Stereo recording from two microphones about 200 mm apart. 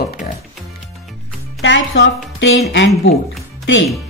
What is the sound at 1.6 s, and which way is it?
Speech, 65° left (ahead or behind).